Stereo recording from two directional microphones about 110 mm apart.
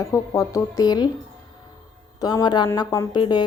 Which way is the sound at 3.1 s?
40° left (ahead or behind).